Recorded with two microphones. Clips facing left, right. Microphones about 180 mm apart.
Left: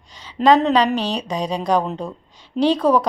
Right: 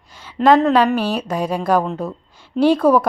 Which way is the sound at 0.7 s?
10° right (ahead or behind).